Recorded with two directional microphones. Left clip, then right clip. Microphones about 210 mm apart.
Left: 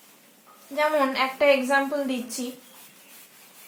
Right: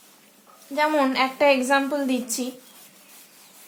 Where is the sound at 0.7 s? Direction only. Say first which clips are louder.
Right 2 dB; 50° right (ahead or behind).